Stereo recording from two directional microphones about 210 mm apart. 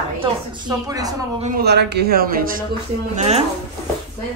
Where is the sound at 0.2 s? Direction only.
20° right (ahead or behind).